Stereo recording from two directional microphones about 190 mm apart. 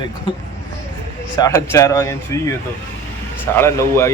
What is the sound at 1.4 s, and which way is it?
Speech, 15° left (ahead or behind).